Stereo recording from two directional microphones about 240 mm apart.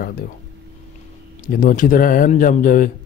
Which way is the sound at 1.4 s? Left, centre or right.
Left.